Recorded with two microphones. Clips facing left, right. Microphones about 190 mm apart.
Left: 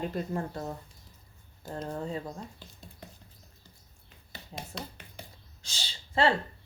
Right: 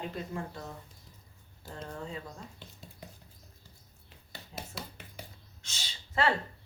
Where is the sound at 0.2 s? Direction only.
40° left (ahead or behind).